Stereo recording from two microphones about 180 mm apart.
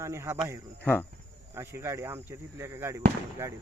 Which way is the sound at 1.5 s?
15° right (ahead or behind).